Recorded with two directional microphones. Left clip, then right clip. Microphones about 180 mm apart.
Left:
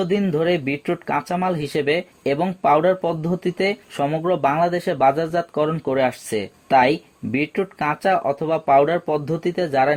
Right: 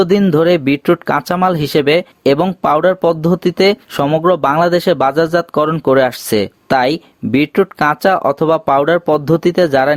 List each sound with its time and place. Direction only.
0.0 s speech: 40° right (ahead or behind)